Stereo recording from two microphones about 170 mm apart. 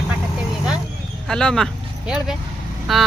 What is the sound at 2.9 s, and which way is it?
Speech, centre (ahead or behind).